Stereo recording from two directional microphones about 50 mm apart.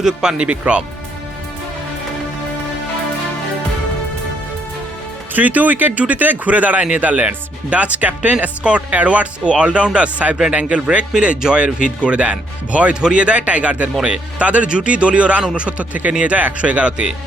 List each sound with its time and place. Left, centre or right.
0.0 s speech: centre
5.3 s a man's voice: right
10.8 s speech: centre